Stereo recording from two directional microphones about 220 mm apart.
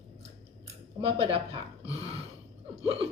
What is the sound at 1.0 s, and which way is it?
Speech, 25° right (ahead or behind).